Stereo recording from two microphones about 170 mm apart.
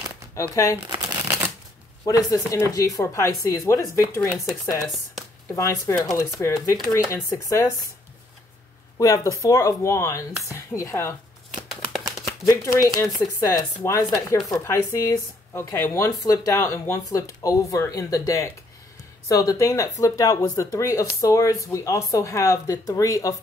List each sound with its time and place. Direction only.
0.4 s speech: 20° left (ahead or behind)
0.8 s shuffling cards: 20° right (ahead or behind)
2.0 s speech: 20° left (ahead or behind)
5.6 s speech: 15° left (ahead or behind)
8.9 s speech: 20° left (ahead or behind)
11.7 s shuffling cards: centre (ahead or behind)
12.4 s speech: 15° left (ahead or behind)